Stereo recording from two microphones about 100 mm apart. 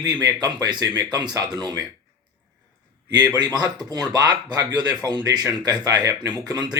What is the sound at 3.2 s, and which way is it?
Speech, 45° right (ahead or behind).